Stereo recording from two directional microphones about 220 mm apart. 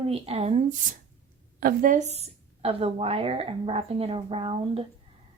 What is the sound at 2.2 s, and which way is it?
Speech, 25° right (ahead or behind).